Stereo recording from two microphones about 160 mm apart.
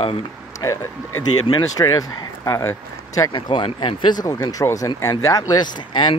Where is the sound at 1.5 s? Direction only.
25° left (ahead or behind).